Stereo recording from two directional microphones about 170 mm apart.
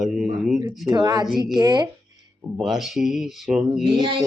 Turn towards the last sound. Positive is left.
turn(degrees=-30)  # may be behind; listen again after turning